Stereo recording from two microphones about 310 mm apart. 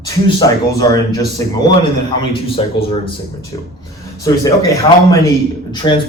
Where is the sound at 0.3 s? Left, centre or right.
Centre.